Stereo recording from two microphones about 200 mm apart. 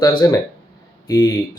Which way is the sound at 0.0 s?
20° left (ahead or behind).